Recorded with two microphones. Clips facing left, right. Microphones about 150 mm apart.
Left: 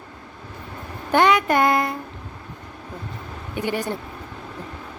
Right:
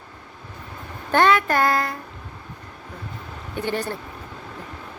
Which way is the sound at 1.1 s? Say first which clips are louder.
Left 1 dB; 15° left (ahead or behind).